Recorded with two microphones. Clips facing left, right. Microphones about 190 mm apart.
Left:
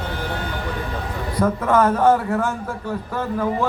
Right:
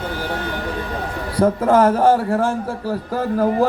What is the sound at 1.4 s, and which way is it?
A man's voice, 30° right (ahead or behind).